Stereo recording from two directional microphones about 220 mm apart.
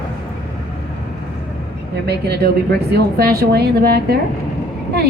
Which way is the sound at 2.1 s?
45° right (ahead or behind).